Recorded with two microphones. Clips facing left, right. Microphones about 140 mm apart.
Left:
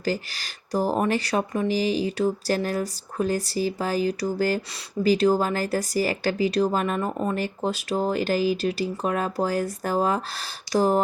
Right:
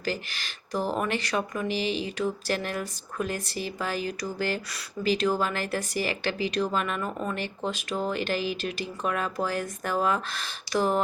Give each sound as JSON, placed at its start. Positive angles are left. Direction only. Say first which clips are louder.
{"t": 0.0, "sound": "speech", "louder": "left 5 dB", "side_deg": 35}